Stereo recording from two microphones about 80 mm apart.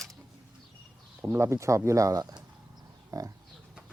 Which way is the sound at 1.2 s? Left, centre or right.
Right.